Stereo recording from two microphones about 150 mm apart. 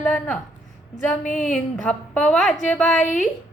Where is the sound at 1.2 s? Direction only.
60° left (ahead or behind).